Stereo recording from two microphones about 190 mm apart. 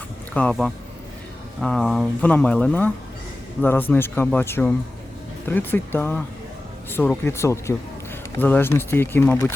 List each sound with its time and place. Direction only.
0.3 s speech: 5° left (ahead or behind)